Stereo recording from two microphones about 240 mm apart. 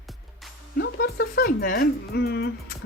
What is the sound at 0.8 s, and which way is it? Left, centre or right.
Speech, left.